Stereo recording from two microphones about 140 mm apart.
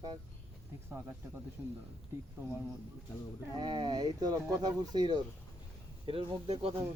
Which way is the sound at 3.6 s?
35° right (ahead or behind).